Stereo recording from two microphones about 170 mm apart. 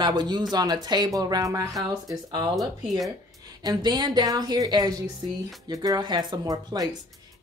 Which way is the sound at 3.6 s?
25° right (ahead or behind).